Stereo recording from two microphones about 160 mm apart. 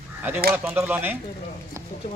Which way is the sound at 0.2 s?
10° right (ahead or behind).